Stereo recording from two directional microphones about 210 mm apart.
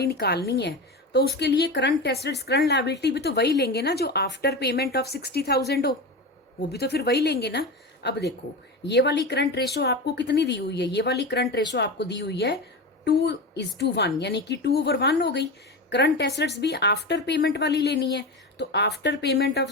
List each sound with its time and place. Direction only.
0.0 s speech: 50° left (ahead or behind)